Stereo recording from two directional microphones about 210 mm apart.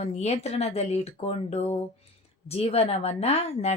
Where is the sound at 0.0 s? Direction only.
30° left (ahead or behind).